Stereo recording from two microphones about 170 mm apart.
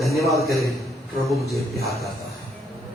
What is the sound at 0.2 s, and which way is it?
Speech, 20° right (ahead or behind).